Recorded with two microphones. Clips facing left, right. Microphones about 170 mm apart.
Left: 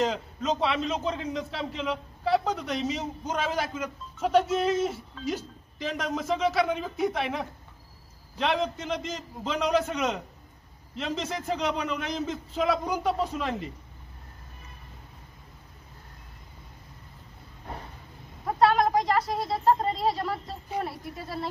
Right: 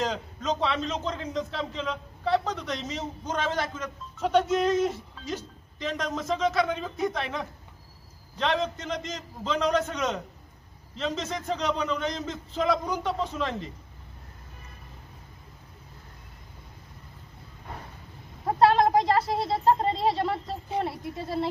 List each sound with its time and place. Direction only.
0.0 s a man's voice: 5° left (ahead or behind)
18.6 s speech: 25° right (ahead or behind)